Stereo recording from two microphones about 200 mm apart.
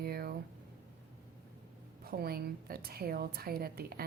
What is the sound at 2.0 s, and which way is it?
A woman's voice, 50° right (ahead or behind).